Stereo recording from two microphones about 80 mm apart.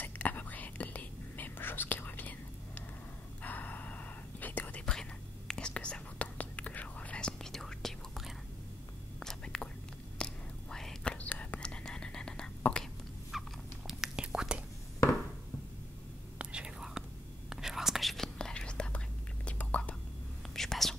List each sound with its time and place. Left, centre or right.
0.0 s whispering: left
5.5 s whispering: centre
9.2 s whispering: centre
11.1 s whispering: centre
13.3 s a sound: centre
13.8 s whispering: centre
16.3 s whispering: centre
20.5 s whispering: centre